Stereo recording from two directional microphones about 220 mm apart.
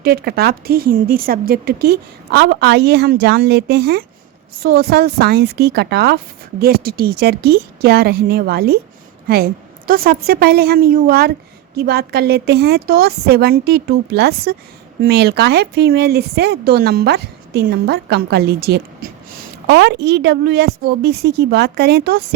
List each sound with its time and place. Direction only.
0.0 s speech: 45° right (ahead or behind)